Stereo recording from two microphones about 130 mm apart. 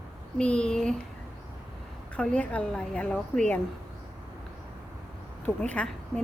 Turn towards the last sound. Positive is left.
turn(degrees=10)  # may be behind; listen again after turning